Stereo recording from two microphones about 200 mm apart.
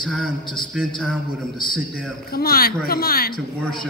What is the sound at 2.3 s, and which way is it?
Speech, 50° left (ahead or behind).